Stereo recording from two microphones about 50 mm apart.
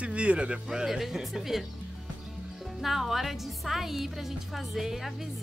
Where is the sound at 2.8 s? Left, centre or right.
Centre.